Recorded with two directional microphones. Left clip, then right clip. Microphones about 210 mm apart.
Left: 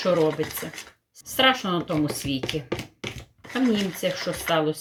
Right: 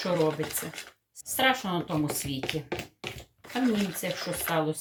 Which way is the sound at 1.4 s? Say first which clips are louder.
Left 5 dB; 5° left (ahead or behind).